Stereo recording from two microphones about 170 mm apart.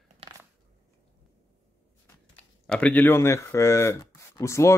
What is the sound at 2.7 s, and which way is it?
Speech, 10° left (ahead or behind).